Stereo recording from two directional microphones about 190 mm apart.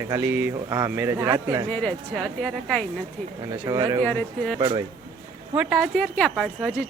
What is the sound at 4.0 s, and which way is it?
Speech, 5° left (ahead or behind).